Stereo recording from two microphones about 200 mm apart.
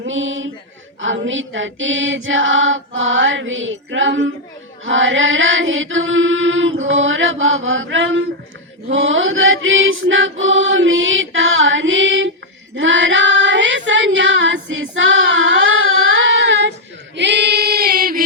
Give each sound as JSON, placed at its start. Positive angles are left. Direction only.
{"t": 0.0, "sound": "choir", "side_deg": -75}
{"t": 12.7, "sound": "female singing", "side_deg": -70}
{"t": 16.3, "sound": "child singing", "side_deg": -65}
{"t": 17.2, "sound": "singing", "side_deg": -60}